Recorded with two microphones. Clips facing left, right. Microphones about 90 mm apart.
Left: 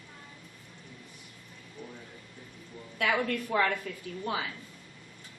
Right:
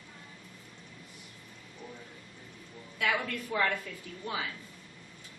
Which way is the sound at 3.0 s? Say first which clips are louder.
Left 3 dB; 50° left (ahead or behind).